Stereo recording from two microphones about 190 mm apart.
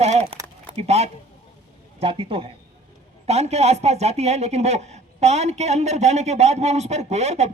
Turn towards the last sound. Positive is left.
turn(degrees=-35)  # may be behind; listen again after turning